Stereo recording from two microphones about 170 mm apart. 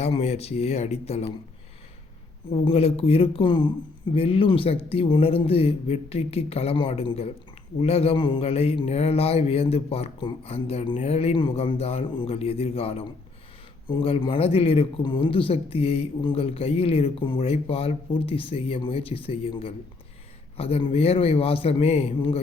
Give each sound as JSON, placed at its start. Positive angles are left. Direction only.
{"t": 0.0, "sound": "speech", "side_deg": 40}
{"t": 2.5, "sound": "speech", "side_deg": 35}